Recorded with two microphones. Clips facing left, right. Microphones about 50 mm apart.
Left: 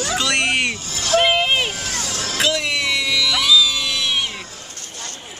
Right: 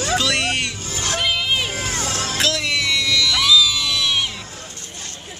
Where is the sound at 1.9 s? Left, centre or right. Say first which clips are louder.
Right 2 dB; right.